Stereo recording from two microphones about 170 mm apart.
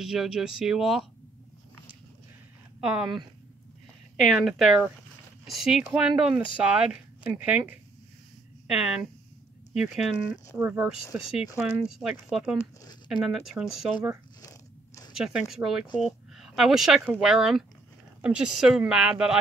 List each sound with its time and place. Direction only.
0.0 s speech: centre (ahead or behind)
2.8 s speech: 5° right (ahead or behind)
4.2 s speech: centre (ahead or behind)
14.4 s biting: 20° left (ahead or behind)
15.1 s speech: 5° right (ahead or behind)